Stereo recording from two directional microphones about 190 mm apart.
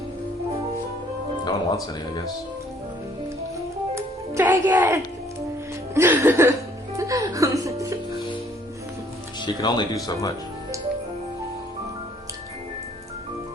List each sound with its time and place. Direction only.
1.5 s speech: 25° left (ahead or behind)
3.9 s music: 15° right (ahead or behind)
9.6 s speech: 20° left (ahead or behind)